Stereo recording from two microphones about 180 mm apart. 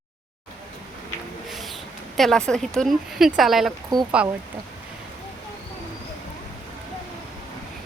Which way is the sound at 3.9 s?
20° right (ahead or behind).